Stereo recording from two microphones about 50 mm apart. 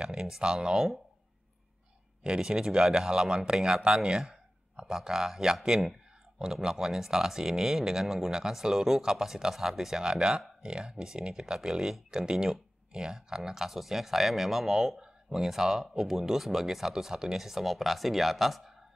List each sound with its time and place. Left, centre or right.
0.0 s speech: centre
2.2 s a man's voice: centre